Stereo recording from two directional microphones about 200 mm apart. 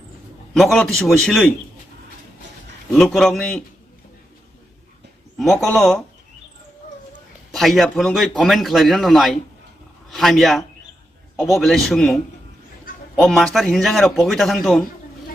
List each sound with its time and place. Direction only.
0.5 s a man's voice: centre (ahead or behind)
2.9 s a man's voice: centre (ahead or behind)
5.4 s a man's voice: centre (ahead or behind)
7.5 s a man's voice: centre (ahead or behind)